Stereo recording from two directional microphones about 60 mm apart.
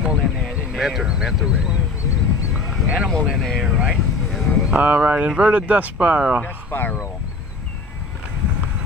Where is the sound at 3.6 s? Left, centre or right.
Centre.